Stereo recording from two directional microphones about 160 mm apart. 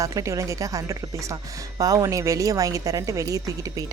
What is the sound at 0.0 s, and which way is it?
A woman's voice, 20° right (ahead or behind).